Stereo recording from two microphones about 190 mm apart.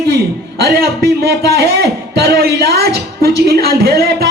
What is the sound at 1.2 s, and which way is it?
A man's voice, 55° right (ahead or behind).